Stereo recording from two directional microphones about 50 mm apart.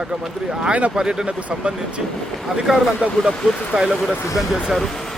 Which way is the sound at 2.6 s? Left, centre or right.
Centre.